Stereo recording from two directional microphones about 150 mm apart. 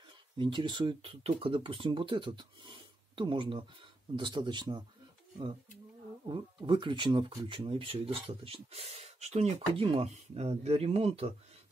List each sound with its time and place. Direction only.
0.4 s speech: 30° right (ahead or behind)
6.2 s speech: 35° right (ahead or behind)